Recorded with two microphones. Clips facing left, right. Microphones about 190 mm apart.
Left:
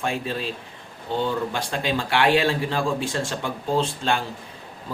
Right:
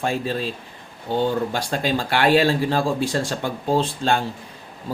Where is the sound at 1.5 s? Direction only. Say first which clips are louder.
Right 3 dB; 35° right (ahead or behind).